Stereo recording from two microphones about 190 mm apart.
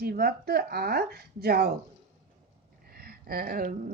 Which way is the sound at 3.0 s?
55° right (ahead or behind).